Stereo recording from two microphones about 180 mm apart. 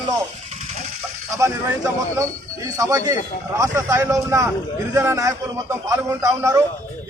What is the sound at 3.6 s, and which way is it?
A man's voice, 15° right (ahead or behind).